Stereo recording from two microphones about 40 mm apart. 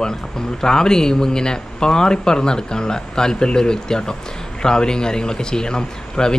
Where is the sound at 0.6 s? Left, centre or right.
Centre.